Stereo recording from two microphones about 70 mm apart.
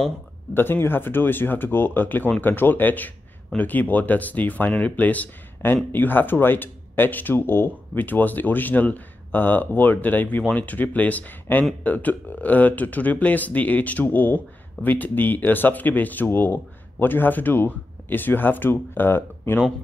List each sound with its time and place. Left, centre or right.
0.6 s speech: left